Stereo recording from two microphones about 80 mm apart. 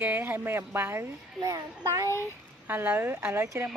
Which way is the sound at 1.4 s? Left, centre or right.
Right.